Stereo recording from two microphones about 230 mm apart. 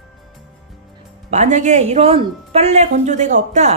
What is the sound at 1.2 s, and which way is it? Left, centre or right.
Speech, right.